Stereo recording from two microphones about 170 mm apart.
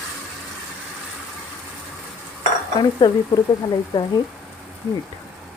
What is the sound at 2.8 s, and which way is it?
Speech, 30° left (ahead or behind).